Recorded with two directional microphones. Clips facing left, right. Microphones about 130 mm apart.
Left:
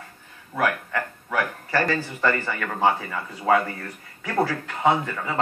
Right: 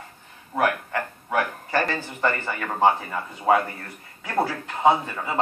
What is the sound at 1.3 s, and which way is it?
A man's voice, 20° right (ahead or behind).